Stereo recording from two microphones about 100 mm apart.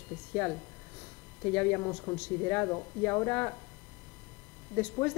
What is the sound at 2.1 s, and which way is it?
Speech, 25° left (ahead or behind).